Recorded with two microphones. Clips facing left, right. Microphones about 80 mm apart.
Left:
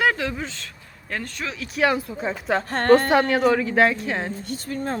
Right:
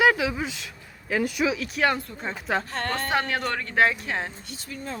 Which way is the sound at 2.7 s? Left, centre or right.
Left.